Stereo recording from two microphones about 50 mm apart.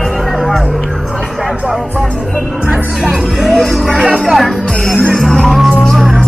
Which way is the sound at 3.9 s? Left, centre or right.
Centre.